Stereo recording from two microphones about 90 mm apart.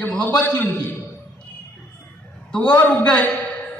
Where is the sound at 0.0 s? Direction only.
15° left (ahead or behind).